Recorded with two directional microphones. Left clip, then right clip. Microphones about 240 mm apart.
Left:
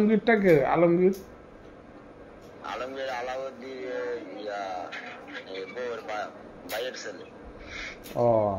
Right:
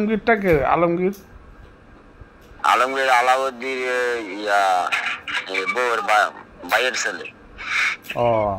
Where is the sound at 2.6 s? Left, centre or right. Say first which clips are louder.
Right 16 dB; right.